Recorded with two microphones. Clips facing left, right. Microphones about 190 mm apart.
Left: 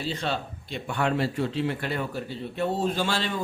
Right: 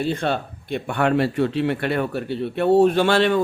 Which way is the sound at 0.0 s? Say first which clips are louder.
Right 7 dB; 55° right (ahead or behind).